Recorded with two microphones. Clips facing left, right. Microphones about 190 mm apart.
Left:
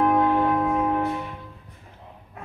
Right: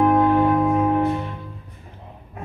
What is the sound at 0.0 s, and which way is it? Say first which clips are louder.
Church bell: right 4 dB; centre (ahead or behind).